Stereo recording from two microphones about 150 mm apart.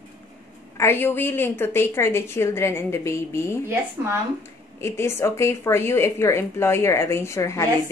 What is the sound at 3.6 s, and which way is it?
Speech, 15° right (ahead or behind).